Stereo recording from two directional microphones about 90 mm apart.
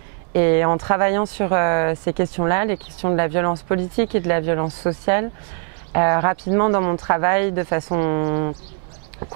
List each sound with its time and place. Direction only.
0.3 s speech: 15° right (ahead or behind)